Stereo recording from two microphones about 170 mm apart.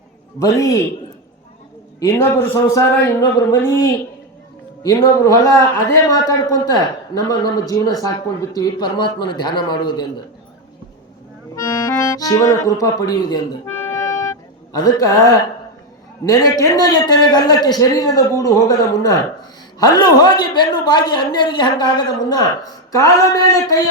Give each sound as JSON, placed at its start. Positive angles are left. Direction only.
{"t": 0.3, "sound": "a man's voice", "side_deg": 20}
{"t": 2.0, "sound": "a man's voice", "side_deg": 15}
{"t": 4.8, "sound": "a man's voice", "side_deg": 20}
{"t": 11.5, "sound": "speech", "side_deg": 20}
{"t": 13.7, "sound": "music", "side_deg": 15}
{"t": 16.2, "sound": "a man's voice", "side_deg": 20}